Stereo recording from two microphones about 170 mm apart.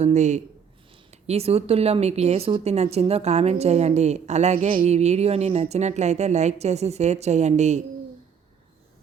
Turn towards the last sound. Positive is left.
turn(degrees=-45)  # may be behind; listen again after turning